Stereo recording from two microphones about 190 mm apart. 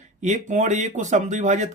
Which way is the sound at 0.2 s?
40° right (ahead or behind).